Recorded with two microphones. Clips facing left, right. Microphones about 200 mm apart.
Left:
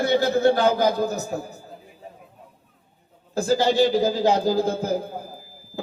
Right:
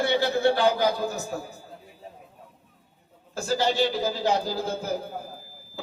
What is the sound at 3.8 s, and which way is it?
Speech, 45° left (ahead or behind).